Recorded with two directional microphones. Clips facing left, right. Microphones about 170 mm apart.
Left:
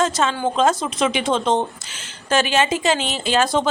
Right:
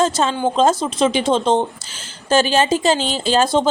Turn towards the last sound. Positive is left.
turn(degrees=-30)  # may be behind; listen again after turning